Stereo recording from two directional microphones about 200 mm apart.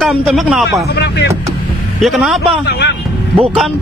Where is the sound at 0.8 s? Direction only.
55° left (ahead or behind).